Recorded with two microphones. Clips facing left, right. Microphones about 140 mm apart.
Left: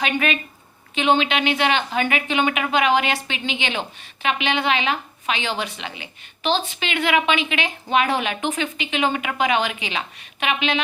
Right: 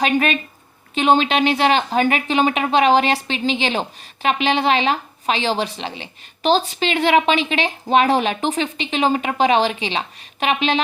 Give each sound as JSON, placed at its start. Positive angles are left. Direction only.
{"t": 0.0, "sound": "a woman's voice", "side_deg": -40}